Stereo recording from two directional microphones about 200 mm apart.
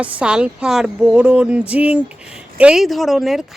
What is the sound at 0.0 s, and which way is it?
Speech, 5° right (ahead or behind).